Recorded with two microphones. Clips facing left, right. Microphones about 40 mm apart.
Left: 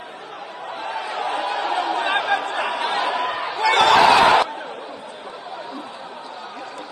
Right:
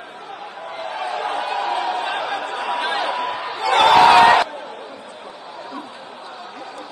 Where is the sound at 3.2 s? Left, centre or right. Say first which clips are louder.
Left 1 dB; left.